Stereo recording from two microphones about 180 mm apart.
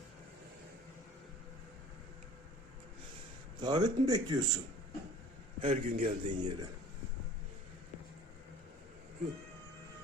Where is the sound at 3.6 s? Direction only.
25° right (ahead or behind).